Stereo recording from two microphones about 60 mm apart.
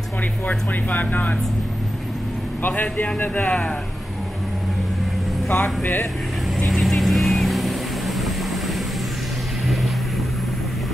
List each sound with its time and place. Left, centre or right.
0.5 s speech: left
2.6 s speech: left
5.5 s speech: left
6.7 s vehicle: centre